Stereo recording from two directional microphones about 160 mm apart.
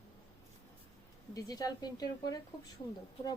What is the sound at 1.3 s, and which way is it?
A woman's voice, 25° left (ahead or behind).